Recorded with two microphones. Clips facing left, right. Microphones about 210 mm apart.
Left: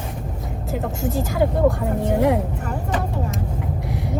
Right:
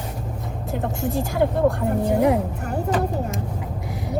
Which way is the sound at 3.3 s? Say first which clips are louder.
Left 2 dB; centre (ahead or behind).